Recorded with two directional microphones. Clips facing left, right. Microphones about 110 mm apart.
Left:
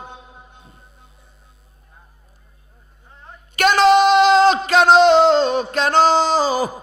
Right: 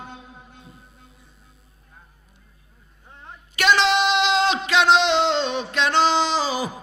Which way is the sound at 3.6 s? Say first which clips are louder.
Left 6 dB; 45° left (ahead or behind).